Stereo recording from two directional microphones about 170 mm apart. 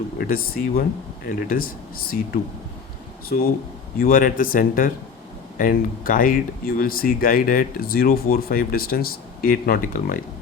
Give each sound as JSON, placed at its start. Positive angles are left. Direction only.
{"t": 0.2, "sound": "speech", "side_deg": 60}
{"t": 3.9, "sound": "speech", "side_deg": 55}